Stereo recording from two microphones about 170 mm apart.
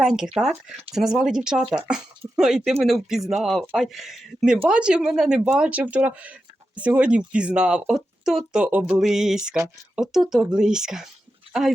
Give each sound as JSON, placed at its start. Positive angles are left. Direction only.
{"t": 0.0, "sound": "speech", "side_deg": -5}
{"t": 1.6, "sound": "speech", "side_deg": -35}
{"t": 1.9, "sound": "speech", "side_deg": -5}